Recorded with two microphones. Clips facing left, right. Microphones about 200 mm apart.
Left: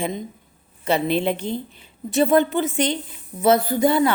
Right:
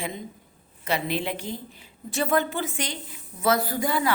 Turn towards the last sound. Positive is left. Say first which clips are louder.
# left 7 dB
turn(degrees=25)  # may be behind; listen again after turning